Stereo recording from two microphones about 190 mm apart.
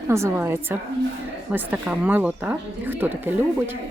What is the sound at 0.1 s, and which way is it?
A woman's voice, 15° right (ahead or behind).